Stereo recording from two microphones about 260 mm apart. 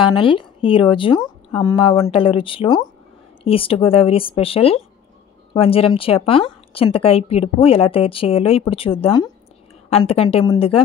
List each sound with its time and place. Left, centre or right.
0.0 s a woman's voice: centre